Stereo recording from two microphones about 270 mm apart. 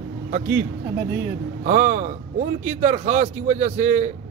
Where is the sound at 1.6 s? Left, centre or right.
Right.